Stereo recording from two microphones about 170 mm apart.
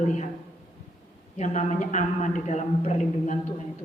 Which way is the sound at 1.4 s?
45° left (ahead or behind).